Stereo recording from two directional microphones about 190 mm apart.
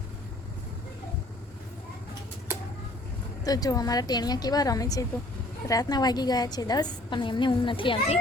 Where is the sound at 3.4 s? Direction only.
20° left (ahead or behind).